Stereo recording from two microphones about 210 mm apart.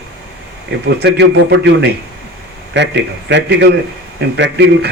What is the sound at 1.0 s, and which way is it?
A man's voice, 50° right (ahead or behind).